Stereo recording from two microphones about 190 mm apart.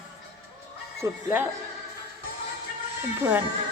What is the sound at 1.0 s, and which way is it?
Speech, 15° right (ahead or behind).